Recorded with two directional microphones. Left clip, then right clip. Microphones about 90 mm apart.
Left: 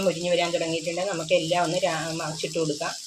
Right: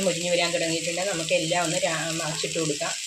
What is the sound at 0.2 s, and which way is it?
Speech, 15° left (ahead or behind).